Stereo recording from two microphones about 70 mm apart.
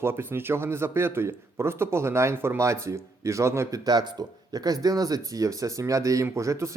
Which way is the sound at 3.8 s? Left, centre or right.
Right.